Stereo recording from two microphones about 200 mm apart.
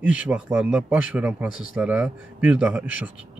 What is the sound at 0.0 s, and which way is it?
A man's voice, 5° right (ahead or behind).